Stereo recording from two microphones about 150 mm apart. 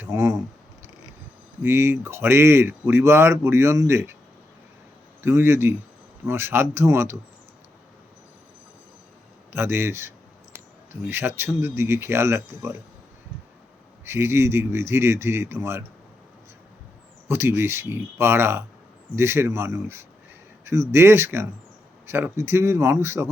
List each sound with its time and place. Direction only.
0.0 s a sound: 15° right (ahead or behind)
1.6 s speech: 15° right (ahead or behind)
5.2 s speech: 15° right (ahead or behind)
9.5 s speech: 15° right (ahead or behind)
14.0 s speech: 15° right (ahead or behind)
17.2 s speech: 15° right (ahead or behind)